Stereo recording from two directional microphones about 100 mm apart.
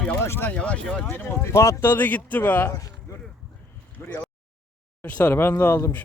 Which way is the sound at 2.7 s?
35° left (ahead or behind).